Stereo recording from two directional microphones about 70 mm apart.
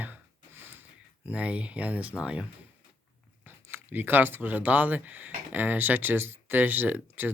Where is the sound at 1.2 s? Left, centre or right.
Centre.